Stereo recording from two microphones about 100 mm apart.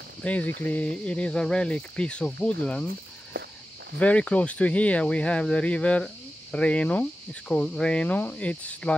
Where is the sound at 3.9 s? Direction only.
10° left (ahead or behind).